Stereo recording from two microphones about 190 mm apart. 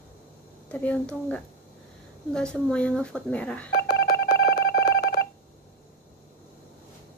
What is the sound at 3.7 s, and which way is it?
Telephone dialing, 60° left (ahead or behind).